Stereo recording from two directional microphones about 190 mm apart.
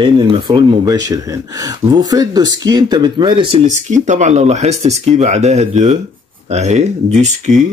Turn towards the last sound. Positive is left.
turn(degrees=-35)  # may be behind; listen again after turning